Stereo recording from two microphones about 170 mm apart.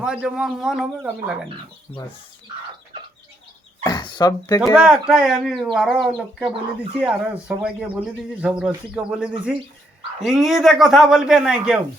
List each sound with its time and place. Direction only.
0.0 s speech: 5° right (ahead or behind)
1.9 s speech: 15° left (ahead or behind)
3.8 s speech: 25° left (ahead or behind)
4.7 s speech: 5° right (ahead or behind)